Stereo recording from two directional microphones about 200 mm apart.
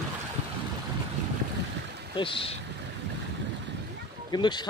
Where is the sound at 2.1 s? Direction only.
25° left (ahead or behind).